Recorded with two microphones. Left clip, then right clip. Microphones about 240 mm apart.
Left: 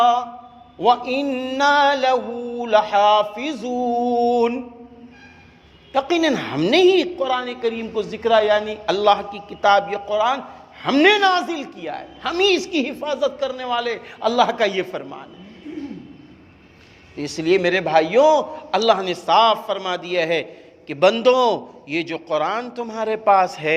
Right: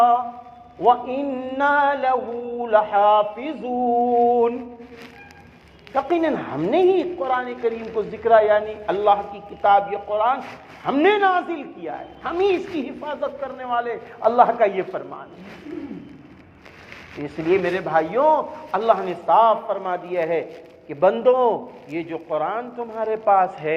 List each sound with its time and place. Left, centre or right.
0.8 s a woman's voice: left
5.9 s a woman's voice: left
17.2 s a woman's voice: left